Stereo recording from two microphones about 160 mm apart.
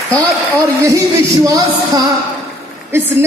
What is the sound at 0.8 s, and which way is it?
Speech, 20° right (ahead or behind).